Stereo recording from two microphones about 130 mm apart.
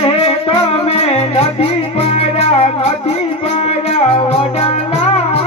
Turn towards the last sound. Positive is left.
turn(degrees=55)  # may be behind; listen again after turning